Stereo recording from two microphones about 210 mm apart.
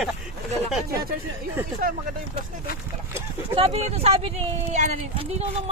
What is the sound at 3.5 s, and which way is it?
Speech, 30° right (ahead or behind).